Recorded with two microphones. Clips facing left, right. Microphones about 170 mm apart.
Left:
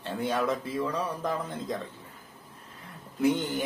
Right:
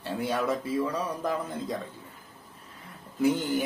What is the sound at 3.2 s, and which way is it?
Speech, 5° right (ahead or behind).